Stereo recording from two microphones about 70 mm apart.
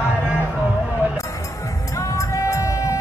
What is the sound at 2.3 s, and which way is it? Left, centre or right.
Music, left.